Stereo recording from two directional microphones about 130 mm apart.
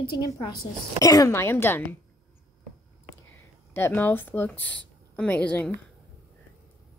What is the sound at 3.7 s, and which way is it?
Speech, 15° left (ahead or behind).